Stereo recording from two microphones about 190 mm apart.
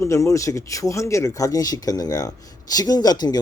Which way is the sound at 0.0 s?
15° left (ahead or behind).